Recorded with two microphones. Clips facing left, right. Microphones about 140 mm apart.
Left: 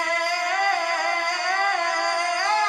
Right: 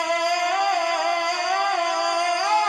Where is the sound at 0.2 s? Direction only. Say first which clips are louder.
Right 3 dB; 20° right (ahead or behind).